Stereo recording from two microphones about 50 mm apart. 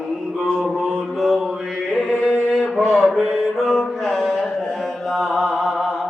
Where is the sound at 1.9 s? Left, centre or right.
Centre.